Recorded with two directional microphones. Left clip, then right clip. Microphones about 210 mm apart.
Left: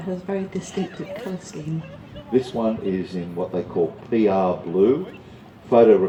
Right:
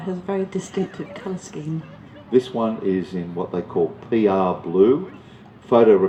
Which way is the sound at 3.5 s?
50° right (ahead or behind).